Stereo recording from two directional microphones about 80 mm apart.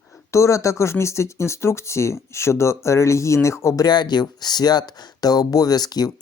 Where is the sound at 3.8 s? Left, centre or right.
Left.